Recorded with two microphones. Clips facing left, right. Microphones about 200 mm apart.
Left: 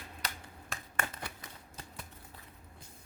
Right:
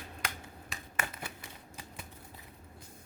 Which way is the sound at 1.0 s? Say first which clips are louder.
Even; 10° right (ahead or behind).